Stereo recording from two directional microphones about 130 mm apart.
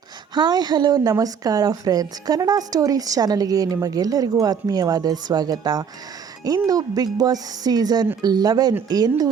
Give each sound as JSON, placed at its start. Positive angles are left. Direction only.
{"t": 0.3, "sound": "a woman's voice", "side_deg": -35}